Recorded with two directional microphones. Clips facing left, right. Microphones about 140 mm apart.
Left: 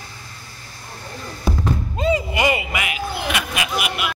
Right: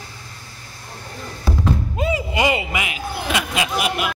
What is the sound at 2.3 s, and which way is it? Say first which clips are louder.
Speech: right 1 dB; 25° right (ahead or behind).